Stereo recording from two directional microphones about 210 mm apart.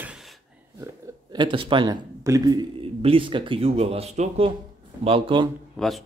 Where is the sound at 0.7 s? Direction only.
15° right (ahead or behind).